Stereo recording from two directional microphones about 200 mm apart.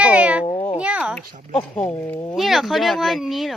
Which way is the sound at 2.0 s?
10° left (ahead or behind).